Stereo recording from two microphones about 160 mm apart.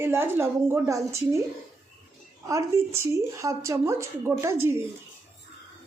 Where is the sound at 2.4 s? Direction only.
20° right (ahead or behind).